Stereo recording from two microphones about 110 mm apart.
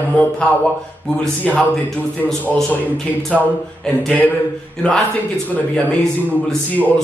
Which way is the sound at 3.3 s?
5° left (ahead or behind).